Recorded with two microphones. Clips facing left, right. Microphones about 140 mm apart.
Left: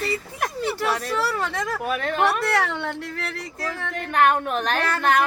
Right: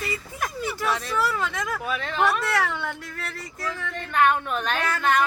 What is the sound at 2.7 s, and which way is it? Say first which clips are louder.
Speech: left 2 dB; 30° left (ahead or behind).